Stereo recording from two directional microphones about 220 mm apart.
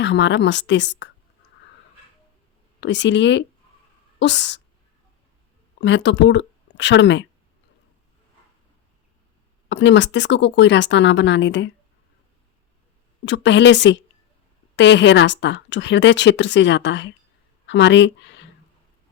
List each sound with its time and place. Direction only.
0.0 s a woman's voice: 55° left (ahead or behind)
2.8 s a woman's voice: 55° left (ahead or behind)
5.8 s speech: 55° left (ahead or behind)
9.6 s speech: 55° left (ahead or behind)
13.2 s a woman's voice: 55° left (ahead or behind)